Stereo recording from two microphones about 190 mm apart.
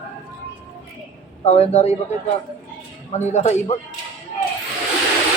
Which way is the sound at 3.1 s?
35° left (ahead or behind).